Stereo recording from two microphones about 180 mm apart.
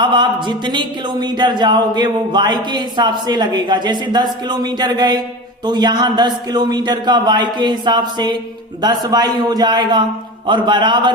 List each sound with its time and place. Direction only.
0.0 s speech: 25° right (ahead or behind)